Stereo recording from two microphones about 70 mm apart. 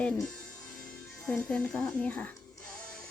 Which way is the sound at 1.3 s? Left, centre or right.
Centre.